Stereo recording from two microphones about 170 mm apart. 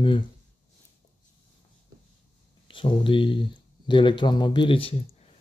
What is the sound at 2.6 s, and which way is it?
Speech, 30° left (ahead or behind).